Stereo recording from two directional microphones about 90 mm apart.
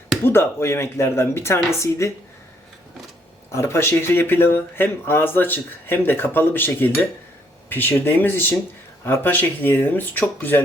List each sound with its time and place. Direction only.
0.3 s speech: 25° left (ahead or behind)
3.5 s speech: 30° left (ahead or behind)